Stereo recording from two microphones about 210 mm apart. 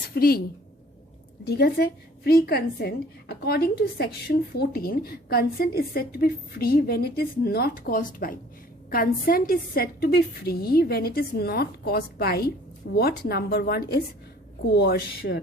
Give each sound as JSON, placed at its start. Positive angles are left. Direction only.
{"t": 0.1, "sound": "a woman's voice", "side_deg": 45}
{"t": 1.5, "sound": "a woman's voice", "side_deg": 50}